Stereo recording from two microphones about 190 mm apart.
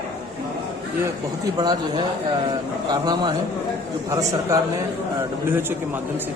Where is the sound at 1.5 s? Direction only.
20° right (ahead or behind).